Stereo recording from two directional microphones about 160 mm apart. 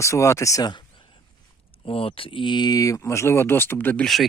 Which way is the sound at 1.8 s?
35° left (ahead or behind).